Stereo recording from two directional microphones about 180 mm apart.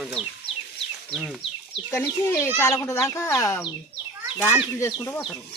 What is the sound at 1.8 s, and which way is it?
Speech, 15° left (ahead or behind).